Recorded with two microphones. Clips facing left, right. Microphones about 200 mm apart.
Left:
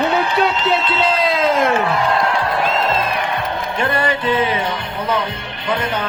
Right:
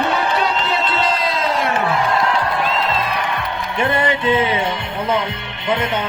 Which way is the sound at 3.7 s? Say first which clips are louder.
Right 2 dB; 20° right (ahead or behind).